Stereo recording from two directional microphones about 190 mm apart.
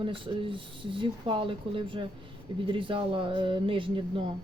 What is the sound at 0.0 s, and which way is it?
Speech, 25° right (ahead or behind).